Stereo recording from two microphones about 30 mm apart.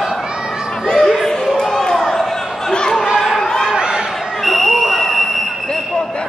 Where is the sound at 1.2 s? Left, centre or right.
Centre.